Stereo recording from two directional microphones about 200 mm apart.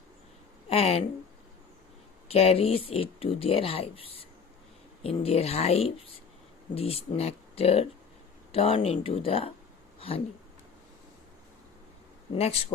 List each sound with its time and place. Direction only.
0.7 s a sound: 30° left (ahead or behind)
2.2 s speech: 30° left (ahead or behind)
5.0 s speech: 30° left (ahead or behind)
12.3 s speech: 30° left (ahead or behind)